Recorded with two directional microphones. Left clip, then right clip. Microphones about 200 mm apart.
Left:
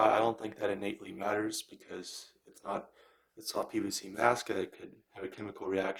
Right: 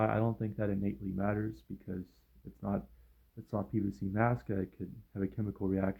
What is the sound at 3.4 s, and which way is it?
Speech, 15° left (ahead or behind).